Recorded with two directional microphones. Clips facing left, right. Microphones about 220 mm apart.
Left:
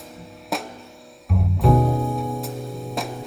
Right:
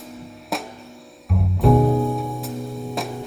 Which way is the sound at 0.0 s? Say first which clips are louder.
Right 3 dB; centre (ahead or behind).